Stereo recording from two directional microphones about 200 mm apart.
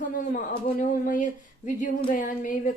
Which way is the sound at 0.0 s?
40° left (ahead or behind).